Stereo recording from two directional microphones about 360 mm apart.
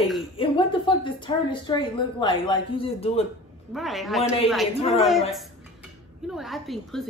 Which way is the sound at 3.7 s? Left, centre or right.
Centre.